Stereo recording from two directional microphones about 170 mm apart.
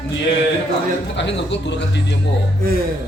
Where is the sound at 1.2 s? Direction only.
90° left.